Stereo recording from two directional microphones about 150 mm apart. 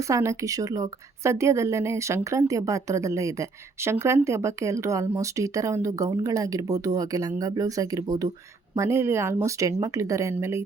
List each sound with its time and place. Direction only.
0.1 s a woman's voice: 20° right (ahead or behind)